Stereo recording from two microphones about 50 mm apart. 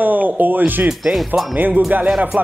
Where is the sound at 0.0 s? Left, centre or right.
Right.